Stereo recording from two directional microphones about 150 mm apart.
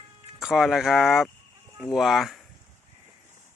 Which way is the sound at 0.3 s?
5° right (ahead or behind).